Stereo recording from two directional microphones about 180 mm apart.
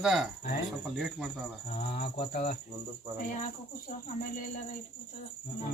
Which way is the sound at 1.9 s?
45° left (ahead or behind).